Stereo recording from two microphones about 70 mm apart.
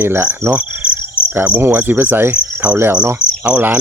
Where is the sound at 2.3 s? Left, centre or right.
Right.